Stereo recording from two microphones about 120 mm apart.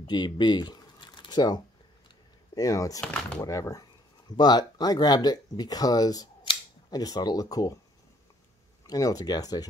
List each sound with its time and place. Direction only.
0.0 s a sound: 35° left (ahead or behind)
2.5 s speech: 30° left (ahead or behind)
3.0 s speech: 10° left (ahead or behind)
3.4 s speech: 30° left (ahead or behind)
8.8 s speech: 30° left (ahead or behind)